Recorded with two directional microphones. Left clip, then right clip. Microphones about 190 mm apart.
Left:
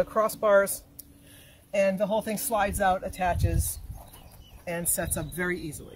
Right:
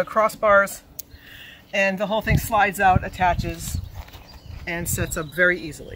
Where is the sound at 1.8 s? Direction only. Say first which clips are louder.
Right 4 dB; 15° left (ahead or behind).